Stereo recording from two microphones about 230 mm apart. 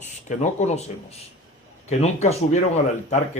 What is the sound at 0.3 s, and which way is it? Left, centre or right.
Speech, left.